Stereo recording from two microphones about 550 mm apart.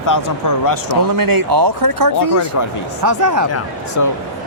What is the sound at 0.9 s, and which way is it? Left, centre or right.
Speech, right.